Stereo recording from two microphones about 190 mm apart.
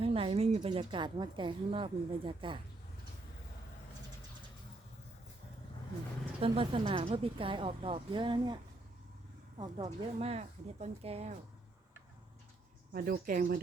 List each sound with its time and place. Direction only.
0.0 s a woman's voice: 30° right (ahead or behind)
6.4 s a woman's voice: 30° right (ahead or behind)
9.6 s speech: 30° right (ahead or behind)
12.9 s speech: 50° right (ahead or behind)